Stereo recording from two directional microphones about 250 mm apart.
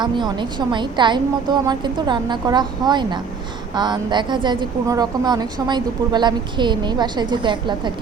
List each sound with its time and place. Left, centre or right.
0.0 s a woman's voice: centre